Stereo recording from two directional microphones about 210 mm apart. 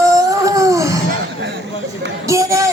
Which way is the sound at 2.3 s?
15° right (ahead or behind).